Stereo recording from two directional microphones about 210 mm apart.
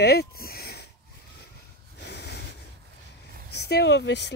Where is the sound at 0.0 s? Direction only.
50° left (ahead or behind).